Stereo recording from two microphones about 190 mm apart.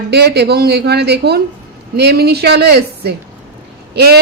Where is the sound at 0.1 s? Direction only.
60° right (ahead or behind).